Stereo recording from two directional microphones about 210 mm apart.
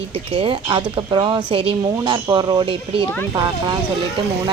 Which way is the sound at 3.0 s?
10° left (ahead or behind).